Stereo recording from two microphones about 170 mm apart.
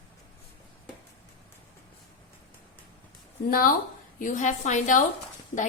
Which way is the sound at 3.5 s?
55° left (ahead or behind).